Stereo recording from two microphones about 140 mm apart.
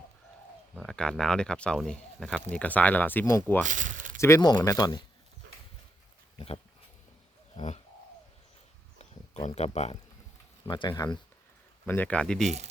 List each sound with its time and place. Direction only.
0.8 s speech: 5° left (ahead or behind)
3.6 s a sound: 65° right (ahead or behind)
4.4 s speech: 30° left (ahead or behind)
9.6 s speech: 50° left (ahead or behind)
10.7 s speech: 30° left (ahead or behind)
11.9 s speech: 10° left (ahead or behind)